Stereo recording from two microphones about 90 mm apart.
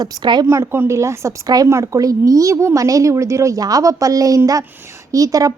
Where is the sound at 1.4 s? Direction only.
45° right (ahead or behind).